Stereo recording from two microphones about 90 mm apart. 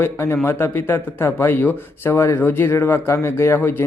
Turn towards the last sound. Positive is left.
turn(degrees=25)  # may be behind; listen again after turning